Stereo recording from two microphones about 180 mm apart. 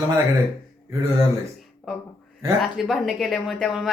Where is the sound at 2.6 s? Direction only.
Centre (ahead or behind).